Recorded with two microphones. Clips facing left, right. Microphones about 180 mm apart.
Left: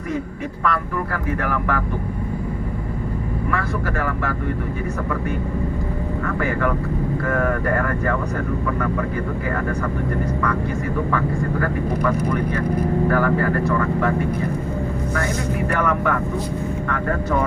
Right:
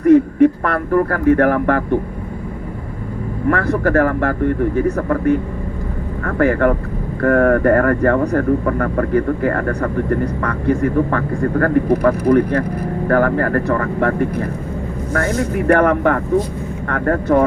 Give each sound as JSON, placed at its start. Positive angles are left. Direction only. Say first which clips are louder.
{"t": 0.0, "sound": "speech", "louder": "right 16 dB", "side_deg": -55}
{"t": 3.5, "sound": "speech", "louder": "right 11 dB", "side_deg": -55}
{"t": 6.4, "sound": "speech", "louder": "right 10 dB", "side_deg": -55}
{"t": 11.6, "sound": "speech", "louder": "right 10 dB", "side_deg": -60}
{"t": 15.7, "sound": "speech", "louder": "right 9 dB", "side_deg": -60}